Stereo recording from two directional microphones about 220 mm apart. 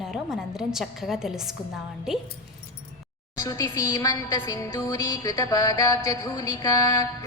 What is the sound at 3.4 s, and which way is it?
A woman's voice, 15° left (ahead or behind).